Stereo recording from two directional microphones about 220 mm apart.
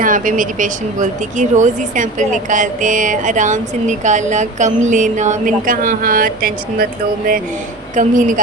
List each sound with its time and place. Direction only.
0.0 s speech: 35° right (ahead or behind)
7.9 s speech: 35° right (ahead or behind)